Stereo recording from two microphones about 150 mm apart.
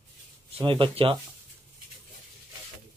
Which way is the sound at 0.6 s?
35° right (ahead or behind).